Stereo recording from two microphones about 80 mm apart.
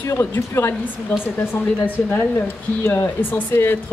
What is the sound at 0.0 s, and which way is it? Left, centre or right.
Speech, left.